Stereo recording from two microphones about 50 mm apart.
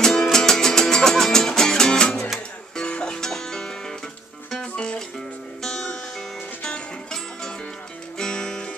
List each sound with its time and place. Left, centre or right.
0.0 s music: centre